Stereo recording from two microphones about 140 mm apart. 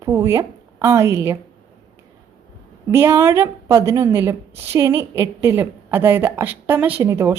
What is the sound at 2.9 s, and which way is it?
A woman's voice, 15° right (ahead or behind).